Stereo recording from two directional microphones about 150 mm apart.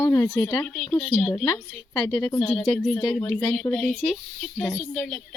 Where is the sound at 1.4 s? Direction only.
20° left (ahead or behind).